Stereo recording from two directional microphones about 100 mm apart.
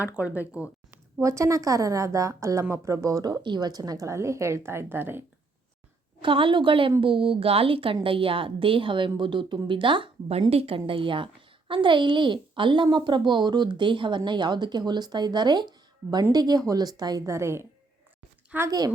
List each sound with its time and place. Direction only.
0.0 s speech: 15° right (ahead or behind)
0.9 s a woman's voice: 30° right (ahead or behind)
6.2 s a woman's voice: 55° right (ahead or behind); by 17.7 s 25° right (ahead or behind)
18.5 s speech: 15° right (ahead or behind)